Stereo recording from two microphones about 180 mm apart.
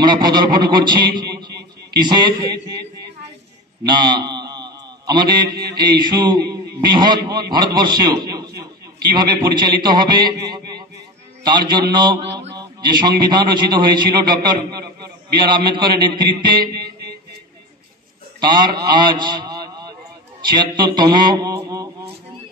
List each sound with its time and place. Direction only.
0.0 s a man's voice: 25° right (ahead or behind)
4.0 s mantra: 25° right (ahead or behind)
5.8 s a man's voice: 25° right (ahead or behind)
18.4 s a man's voice: 25° right (ahead or behind)